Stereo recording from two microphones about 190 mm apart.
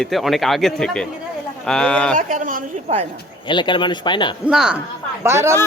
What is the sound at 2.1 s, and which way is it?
Speech, 40° right (ahead or behind).